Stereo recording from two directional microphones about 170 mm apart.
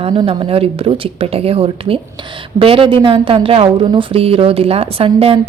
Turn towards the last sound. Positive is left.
turn(degrees=-35)  # may be behind; listen again after turning